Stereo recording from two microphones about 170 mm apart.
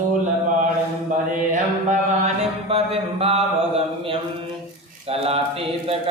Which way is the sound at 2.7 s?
35° right (ahead or behind).